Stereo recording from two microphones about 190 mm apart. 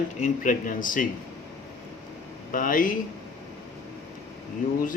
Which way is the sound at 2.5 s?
45° left (ahead or behind).